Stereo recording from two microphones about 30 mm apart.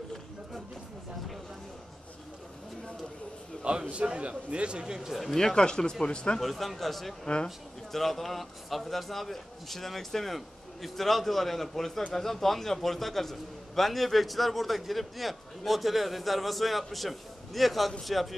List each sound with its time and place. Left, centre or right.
3.9 s a man's voice: right
5.3 s speech: left
6.4 s a man's voice: centre